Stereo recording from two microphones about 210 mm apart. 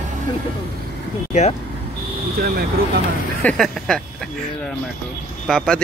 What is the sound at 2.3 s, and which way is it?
Speech, 45° right (ahead or behind).